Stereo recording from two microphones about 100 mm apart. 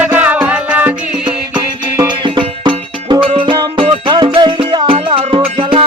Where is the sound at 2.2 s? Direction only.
55° right (ahead or behind).